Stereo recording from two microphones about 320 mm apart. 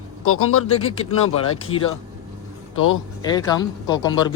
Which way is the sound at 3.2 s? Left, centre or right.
Centre.